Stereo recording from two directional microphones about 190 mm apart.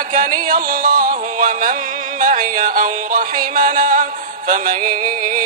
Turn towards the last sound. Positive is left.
turn(degrees=-45)  # may be behind; listen again after turning